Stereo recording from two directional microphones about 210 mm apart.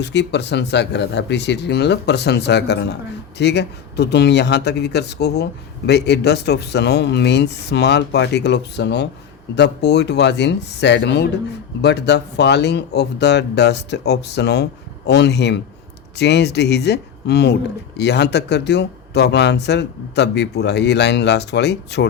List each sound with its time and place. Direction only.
0.0 s speech: 55° left (ahead or behind)